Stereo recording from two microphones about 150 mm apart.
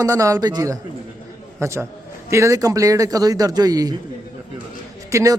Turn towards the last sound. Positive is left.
turn(degrees=-20)  # may be behind; listen again after turning